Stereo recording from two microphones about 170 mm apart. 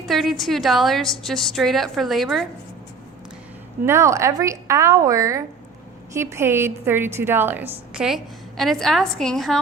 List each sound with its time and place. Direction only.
0.0 s a woman's voice: centre (ahead or behind)
3.8 s a woman's voice: 15° right (ahead or behind); by 9.6 s centre (ahead or behind)